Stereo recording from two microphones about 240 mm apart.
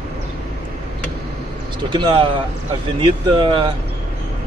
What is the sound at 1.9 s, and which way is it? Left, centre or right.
Speech, centre.